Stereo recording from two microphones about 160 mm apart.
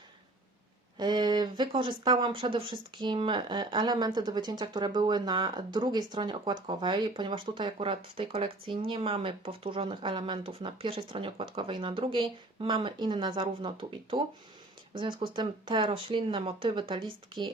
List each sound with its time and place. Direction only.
0.9 s speech: 25° right (ahead or behind)